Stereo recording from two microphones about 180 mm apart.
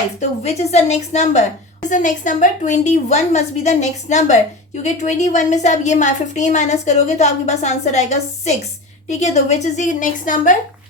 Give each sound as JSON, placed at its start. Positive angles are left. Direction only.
{"t": 0.2, "sound": "a woman's voice", "side_deg": 35}